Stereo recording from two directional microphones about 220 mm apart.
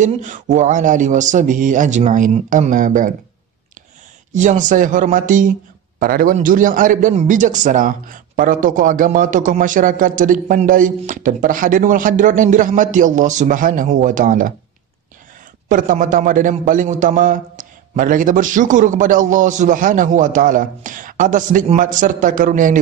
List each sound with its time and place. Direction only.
0.0 s a man's voice: 35° right (ahead or behind)
4.3 s a man's voice: 35° right (ahead or behind)
15.7 s a man's voice: 35° right (ahead or behind)